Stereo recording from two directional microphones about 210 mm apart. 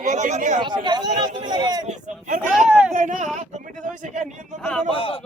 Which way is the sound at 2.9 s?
40° right (ahead or behind).